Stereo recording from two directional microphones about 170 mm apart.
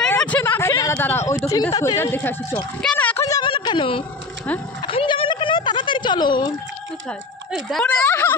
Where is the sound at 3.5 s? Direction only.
30° left (ahead or behind).